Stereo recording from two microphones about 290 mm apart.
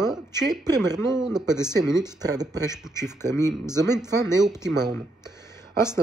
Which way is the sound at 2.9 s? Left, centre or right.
Centre.